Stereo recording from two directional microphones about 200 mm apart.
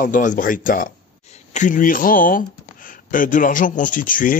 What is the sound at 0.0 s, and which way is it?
Speech, 40° left (ahead or behind).